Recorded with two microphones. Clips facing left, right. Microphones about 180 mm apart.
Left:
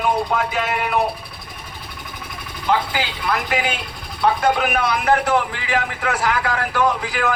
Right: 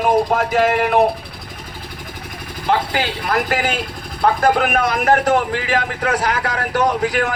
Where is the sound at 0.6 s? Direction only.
75° right (ahead or behind).